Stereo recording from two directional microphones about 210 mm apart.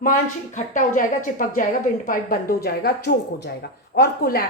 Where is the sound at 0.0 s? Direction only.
40° left (ahead or behind).